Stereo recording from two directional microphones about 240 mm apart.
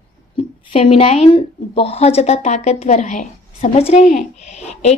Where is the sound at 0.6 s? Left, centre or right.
Left.